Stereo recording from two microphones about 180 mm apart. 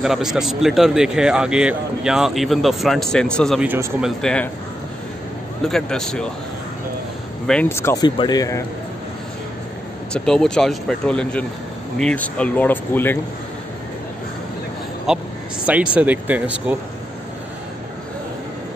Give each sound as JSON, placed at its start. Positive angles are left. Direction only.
{"t": 0.0, "sound": "speech", "side_deg": 0}
{"t": 3.6, "sound": "speech", "side_deg": -10}
{"t": 4.2, "sound": "speech", "side_deg": 5}
{"t": 5.7, "sound": "speech", "side_deg": 0}
{"t": 7.4, "sound": "speech", "side_deg": 10}
{"t": 10.1, "sound": "speech", "side_deg": 5}
{"t": 15.1, "sound": "speech", "side_deg": -5}